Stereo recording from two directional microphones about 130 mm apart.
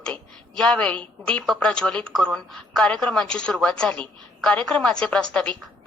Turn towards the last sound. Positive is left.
turn(degrees=10)  # may be behind; listen again after turning